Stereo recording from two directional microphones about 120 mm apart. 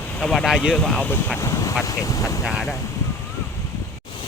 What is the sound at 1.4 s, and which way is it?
Speech, 25° left (ahead or behind).